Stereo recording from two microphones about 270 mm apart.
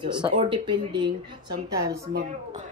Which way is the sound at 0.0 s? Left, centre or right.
Centre.